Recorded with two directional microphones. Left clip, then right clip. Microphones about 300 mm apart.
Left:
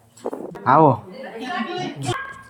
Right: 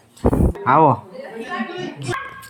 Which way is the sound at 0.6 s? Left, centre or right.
Centre.